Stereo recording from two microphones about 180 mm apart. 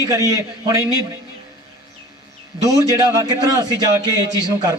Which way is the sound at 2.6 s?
20° right (ahead or behind).